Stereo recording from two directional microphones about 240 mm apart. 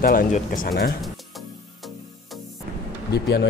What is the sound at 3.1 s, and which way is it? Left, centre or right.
Speech, left.